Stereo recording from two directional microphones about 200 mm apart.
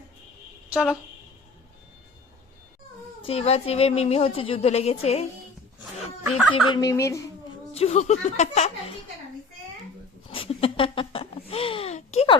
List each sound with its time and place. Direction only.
0.7 s speech: 5° right (ahead or behind)
3.2 s a woman's voice: 30° left (ahead or behind)
6.7 s speech: 15° left (ahead or behind)
7.7 s a woman's voice: 30° left (ahead or behind)
10.2 s a sound: 30° left (ahead or behind)